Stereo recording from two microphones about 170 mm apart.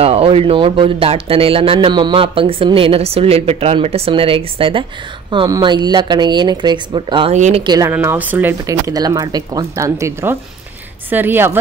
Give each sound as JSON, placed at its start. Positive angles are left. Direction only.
{"t": 0.0, "sound": "speech", "side_deg": -35}
{"t": 7.3, "sound": "speech", "side_deg": -45}
{"t": 7.6, "sound": "speech", "side_deg": -25}
{"t": 7.9, "sound": "speech", "side_deg": -10}